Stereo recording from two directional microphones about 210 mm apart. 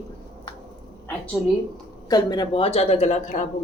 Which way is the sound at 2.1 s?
20° left (ahead or behind).